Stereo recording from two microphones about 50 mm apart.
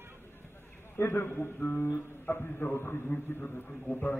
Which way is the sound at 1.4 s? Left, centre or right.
Left.